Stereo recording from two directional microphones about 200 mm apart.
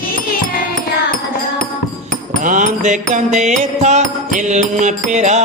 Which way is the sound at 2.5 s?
40° right (ahead or behind).